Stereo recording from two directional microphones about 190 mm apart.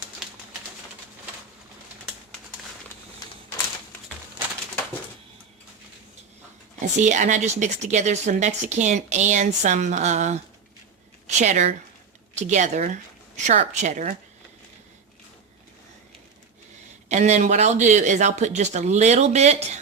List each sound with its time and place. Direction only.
7.0 s a woman's voice: 40° right (ahead or behind)
17.1 s speech: 35° right (ahead or behind)